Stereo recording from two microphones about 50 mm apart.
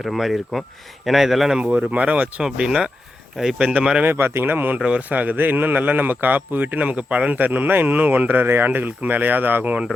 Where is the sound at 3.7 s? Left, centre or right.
Centre.